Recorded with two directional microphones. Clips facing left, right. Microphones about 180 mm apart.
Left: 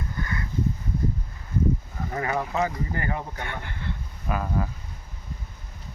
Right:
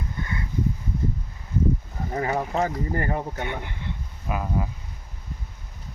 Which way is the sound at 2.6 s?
40° right (ahead or behind).